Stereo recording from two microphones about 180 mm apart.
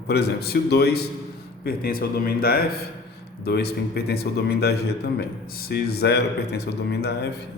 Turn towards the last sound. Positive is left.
turn(degrees=65)  # may be behind; listen again after turning